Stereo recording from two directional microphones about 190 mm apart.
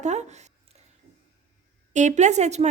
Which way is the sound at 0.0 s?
35° right (ahead or behind).